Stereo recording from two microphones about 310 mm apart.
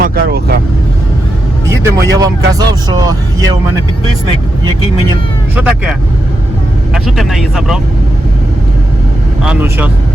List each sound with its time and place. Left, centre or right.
0.0 s speech: right
1.8 s speech: centre
5.5 s speech: centre
9.4 s speech: centre